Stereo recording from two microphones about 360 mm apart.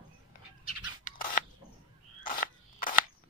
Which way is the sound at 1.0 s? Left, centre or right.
Left.